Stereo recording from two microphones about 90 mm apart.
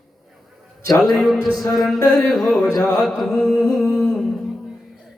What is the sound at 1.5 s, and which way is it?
Music, 40° left (ahead or behind).